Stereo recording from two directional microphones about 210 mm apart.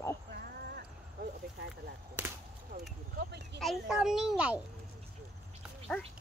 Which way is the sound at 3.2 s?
50° right (ahead or behind).